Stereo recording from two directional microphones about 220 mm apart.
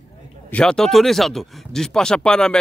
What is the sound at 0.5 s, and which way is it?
Speech, 5° left (ahead or behind).